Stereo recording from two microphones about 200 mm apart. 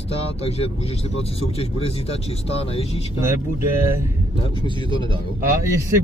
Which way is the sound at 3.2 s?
10° right (ahead or behind).